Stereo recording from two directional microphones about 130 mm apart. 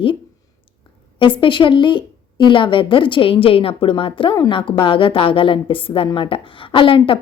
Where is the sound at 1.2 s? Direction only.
40° left (ahead or behind).